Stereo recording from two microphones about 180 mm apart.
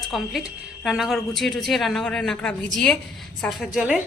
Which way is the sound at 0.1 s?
Centre (ahead or behind).